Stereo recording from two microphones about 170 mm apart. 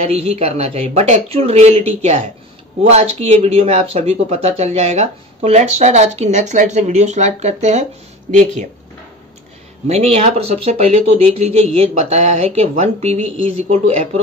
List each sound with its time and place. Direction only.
0.0 s speech: 35° right (ahead or behind)
9.8 s speech: 40° right (ahead or behind)